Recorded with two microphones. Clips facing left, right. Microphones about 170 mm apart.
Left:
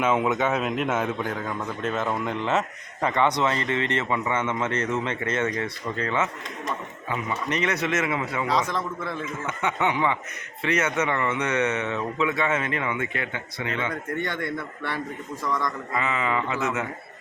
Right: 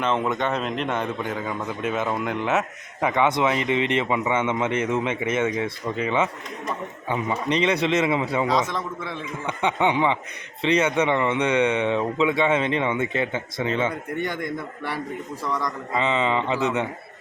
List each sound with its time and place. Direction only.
0.0 s a man's voice: 5° left (ahead or behind); by 8.4 s 25° right (ahead or behind)
8.7 s a man's voice: centre (ahead or behind)
9.6 s speech: 25° right (ahead or behind)
14.1 s a man's voice: 10° right (ahead or behind)
16.0 s speech: 20° right (ahead or behind)